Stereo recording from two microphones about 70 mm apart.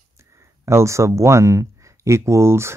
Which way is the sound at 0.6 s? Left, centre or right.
Right.